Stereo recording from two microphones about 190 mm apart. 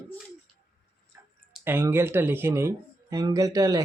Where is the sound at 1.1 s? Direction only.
10° right (ahead or behind).